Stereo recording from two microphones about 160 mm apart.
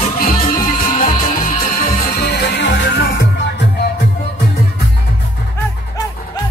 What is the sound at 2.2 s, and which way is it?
Music, 90° left.